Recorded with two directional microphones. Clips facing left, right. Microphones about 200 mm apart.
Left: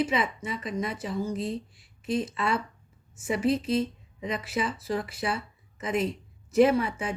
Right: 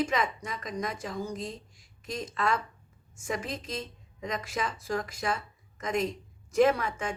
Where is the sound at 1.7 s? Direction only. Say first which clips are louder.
Left 8 dB; 45° right (ahead or behind).